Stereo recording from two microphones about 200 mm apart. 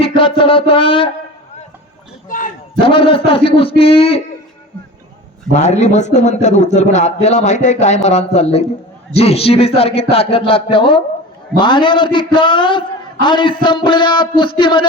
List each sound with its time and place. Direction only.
0.0 s a sound: 25° left (ahead or behind)
2.8 s speech: 25° left (ahead or behind)
5.5 s speech: 35° left (ahead or behind)